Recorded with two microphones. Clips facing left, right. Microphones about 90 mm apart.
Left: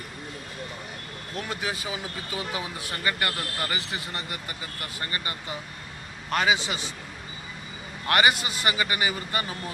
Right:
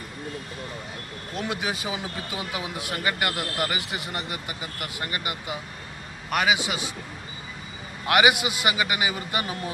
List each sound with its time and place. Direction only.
1.4 s a man's voice: 20° right (ahead or behind)
8.0 s a man's voice: 15° right (ahead or behind)